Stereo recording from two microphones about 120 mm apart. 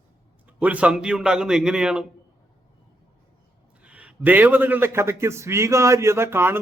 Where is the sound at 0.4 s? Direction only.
10° right (ahead or behind).